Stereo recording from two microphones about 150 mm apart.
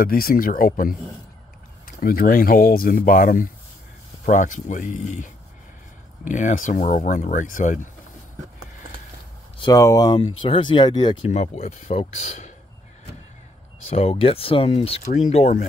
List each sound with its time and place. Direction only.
0.0 s speech: 75° left (ahead or behind)
2.0 s speech: 80° left
4.3 s speech: 55° left (ahead or behind)
9.6 s speech: 25° left (ahead or behind)
11.2 s speech: 50° left (ahead or behind)
13.8 s speech: 40° left (ahead or behind)